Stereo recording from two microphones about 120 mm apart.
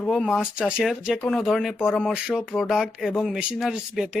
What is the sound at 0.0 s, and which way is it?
Speech, 5° left (ahead or behind).